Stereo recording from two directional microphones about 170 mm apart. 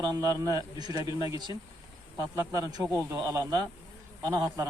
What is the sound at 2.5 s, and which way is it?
A man's voice, 20° right (ahead or behind).